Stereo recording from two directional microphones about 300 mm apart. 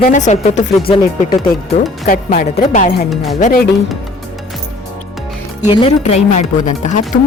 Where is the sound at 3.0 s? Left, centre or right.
Centre.